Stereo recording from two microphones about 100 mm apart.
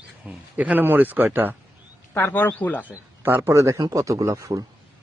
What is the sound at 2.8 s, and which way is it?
Speech, 20° right (ahead or behind).